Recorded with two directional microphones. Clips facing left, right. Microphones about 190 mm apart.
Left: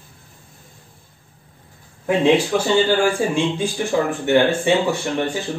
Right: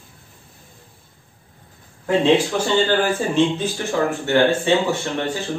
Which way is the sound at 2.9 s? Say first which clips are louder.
Left 2 dB; 10° left (ahead or behind).